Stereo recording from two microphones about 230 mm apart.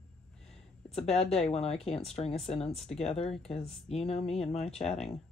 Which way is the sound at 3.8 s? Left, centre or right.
Left.